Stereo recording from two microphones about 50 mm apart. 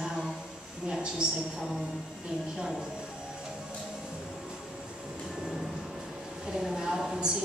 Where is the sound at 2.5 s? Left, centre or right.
Centre.